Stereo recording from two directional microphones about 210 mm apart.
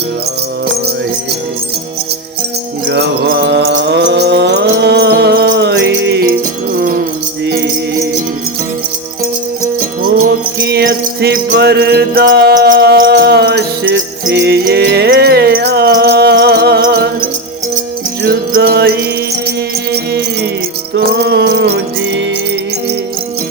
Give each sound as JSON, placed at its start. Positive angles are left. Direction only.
{"t": 2.9, "sound": "mantra", "side_deg": -50}
{"t": 6.7, "sound": "music", "side_deg": -40}
{"t": 7.4, "sound": "music", "side_deg": -55}
{"t": 10.2, "sound": "music", "side_deg": -50}